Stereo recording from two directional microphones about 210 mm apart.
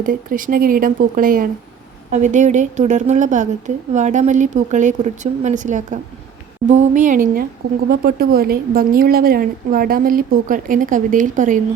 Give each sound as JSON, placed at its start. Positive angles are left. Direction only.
{"t": 0.0, "sound": "a woman's voice", "side_deg": -40}